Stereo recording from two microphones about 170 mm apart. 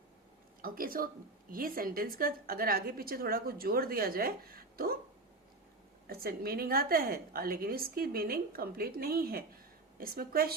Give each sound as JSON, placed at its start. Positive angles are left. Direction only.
{"t": 0.6, "sound": "a woman's voice", "side_deg": -60}
{"t": 6.1, "sound": "a woman's voice", "side_deg": -65}